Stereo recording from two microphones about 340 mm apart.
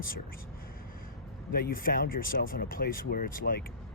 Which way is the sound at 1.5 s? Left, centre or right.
Left.